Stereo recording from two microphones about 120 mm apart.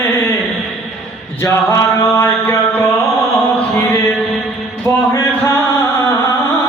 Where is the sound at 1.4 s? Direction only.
20° left (ahead or behind).